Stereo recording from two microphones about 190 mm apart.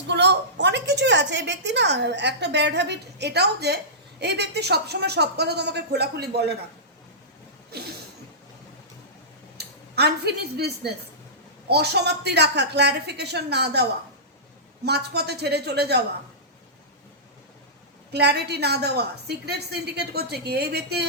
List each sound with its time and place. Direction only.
0.1 s a woman's voice: 65° right (ahead or behind)
7.7 s a sound: 55° right (ahead or behind)
9.6 s a woman's voice: 60° right (ahead or behind)
14.8 s a woman's voice: 60° right (ahead or behind)
18.1 s a woman's voice: 60° right (ahead or behind)